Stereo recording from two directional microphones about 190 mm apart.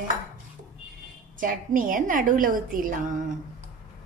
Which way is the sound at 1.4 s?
45° right (ahead or behind).